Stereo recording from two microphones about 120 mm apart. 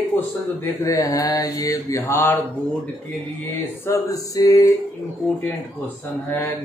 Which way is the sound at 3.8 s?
25° left (ahead or behind).